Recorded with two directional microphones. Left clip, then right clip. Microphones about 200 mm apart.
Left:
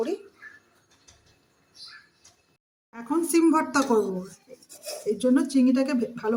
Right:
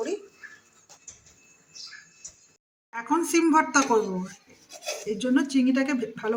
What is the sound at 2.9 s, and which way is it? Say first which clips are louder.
Speech: even; 30° left (ahead or behind).